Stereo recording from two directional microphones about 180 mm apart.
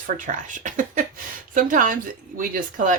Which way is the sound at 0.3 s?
45° right (ahead or behind).